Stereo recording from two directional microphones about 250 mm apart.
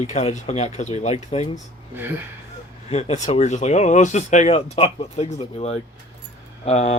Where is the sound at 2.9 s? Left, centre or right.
Left.